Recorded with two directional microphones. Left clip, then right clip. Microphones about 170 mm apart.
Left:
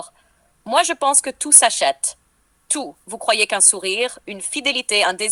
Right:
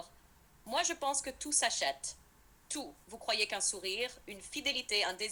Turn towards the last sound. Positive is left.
turn(degrees=50)  # may be behind; listen again after turning